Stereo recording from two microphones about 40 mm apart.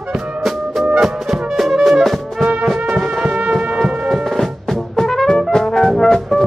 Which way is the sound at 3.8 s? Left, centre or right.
Centre.